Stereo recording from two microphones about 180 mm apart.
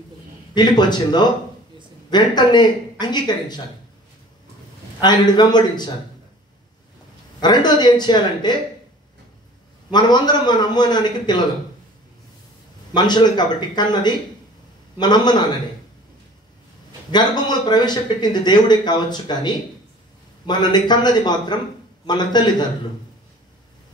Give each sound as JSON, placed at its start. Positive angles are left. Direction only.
{"t": 0.6, "sound": "speech", "side_deg": 25}
{"t": 5.0, "sound": "speech", "side_deg": 25}
{"t": 7.3, "sound": "speech", "side_deg": 25}
{"t": 9.8, "sound": "speech", "side_deg": 25}
{"t": 12.9, "sound": "speech", "side_deg": 25}
{"t": 17.1, "sound": "speech", "side_deg": 25}